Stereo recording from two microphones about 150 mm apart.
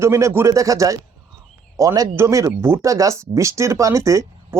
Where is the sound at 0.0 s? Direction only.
20° right (ahead or behind).